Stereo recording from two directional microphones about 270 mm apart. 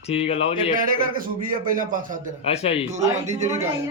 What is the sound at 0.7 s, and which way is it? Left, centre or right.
A man's voice, right.